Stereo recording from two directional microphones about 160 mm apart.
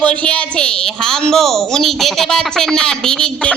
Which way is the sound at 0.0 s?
10° left (ahead or behind).